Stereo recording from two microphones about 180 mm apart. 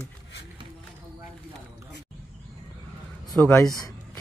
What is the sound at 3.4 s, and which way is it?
Speech, 5° left (ahead or behind).